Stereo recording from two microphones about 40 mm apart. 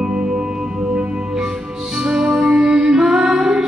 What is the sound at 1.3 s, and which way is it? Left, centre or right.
Music, centre.